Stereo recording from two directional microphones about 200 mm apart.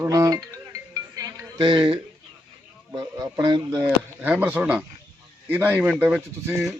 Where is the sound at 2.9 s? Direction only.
20° right (ahead or behind).